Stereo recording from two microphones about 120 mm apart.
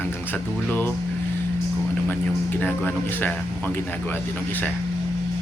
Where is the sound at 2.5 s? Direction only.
15° left (ahead or behind).